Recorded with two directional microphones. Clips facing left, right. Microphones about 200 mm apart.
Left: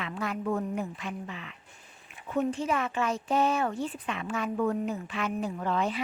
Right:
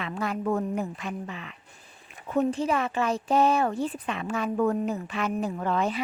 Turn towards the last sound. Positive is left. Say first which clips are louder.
# right 2 dB
turn(degrees=-45)  # may be behind; listen again after turning